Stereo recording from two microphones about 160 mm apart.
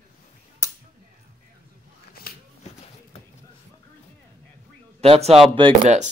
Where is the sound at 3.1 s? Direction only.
40° left (ahead or behind).